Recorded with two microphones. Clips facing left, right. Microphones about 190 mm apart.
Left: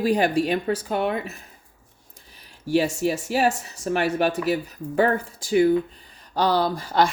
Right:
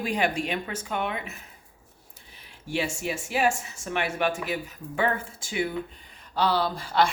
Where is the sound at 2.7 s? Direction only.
40° left (ahead or behind).